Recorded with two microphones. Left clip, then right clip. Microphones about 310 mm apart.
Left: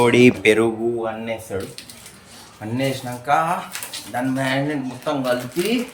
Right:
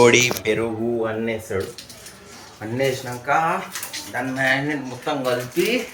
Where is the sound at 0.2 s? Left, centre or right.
Left.